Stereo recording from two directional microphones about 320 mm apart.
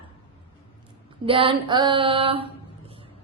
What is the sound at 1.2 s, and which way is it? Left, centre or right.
A woman's voice, centre.